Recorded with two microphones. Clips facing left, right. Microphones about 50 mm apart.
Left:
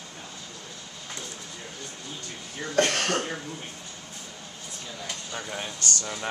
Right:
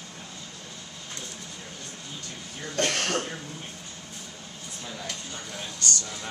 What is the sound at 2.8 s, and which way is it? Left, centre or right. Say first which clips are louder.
Cough: left 1 dB; centre.